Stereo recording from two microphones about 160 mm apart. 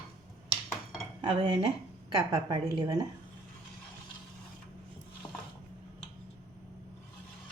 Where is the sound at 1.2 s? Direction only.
35° right (ahead or behind).